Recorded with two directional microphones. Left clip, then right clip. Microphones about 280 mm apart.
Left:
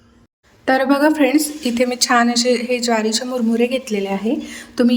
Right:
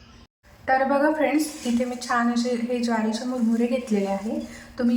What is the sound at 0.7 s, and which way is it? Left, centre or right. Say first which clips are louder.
Speech: left 5 dB; left.